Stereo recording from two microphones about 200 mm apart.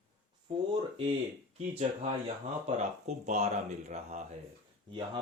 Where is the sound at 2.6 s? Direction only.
35° right (ahead or behind).